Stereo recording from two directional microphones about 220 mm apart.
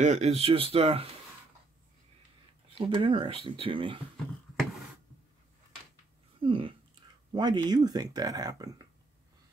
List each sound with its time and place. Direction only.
0.0 s speech: 30° right (ahead or behind)
2.7 s speech: 25° right (ahead or behind)
6.4 s speech: 25° right (ahead or behind)